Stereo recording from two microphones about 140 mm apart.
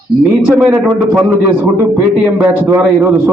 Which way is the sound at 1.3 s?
15° right (ahead or behind).